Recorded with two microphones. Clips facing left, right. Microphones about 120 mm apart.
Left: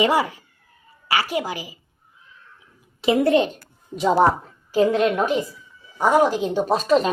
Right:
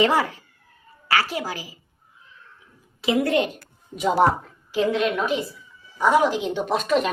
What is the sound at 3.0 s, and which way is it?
A woman's voice, 25° left (ahead or behind).